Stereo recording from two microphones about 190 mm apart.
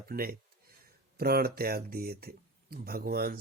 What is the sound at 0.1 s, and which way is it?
Speech, 50° right (ahead or behind).